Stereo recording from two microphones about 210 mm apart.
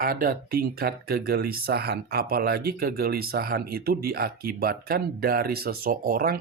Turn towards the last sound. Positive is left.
turn(degrees=-45)  # may be behind; listen again after turning